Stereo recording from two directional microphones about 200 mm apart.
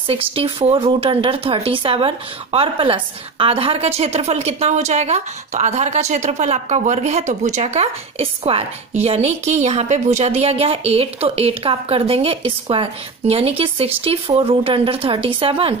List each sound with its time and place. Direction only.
0.1 s speech: 30° right (ahead or behind)